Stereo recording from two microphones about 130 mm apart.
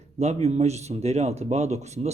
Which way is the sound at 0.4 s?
55° right (ahead or behind).